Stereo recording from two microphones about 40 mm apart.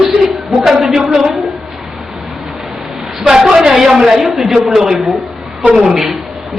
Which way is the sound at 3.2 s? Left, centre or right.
Centre.